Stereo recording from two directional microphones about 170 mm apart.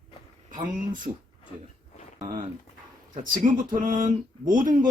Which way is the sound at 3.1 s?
55° right (ahead or behind).